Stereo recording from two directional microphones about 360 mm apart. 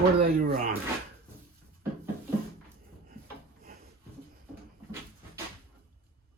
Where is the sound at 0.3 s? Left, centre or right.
Right.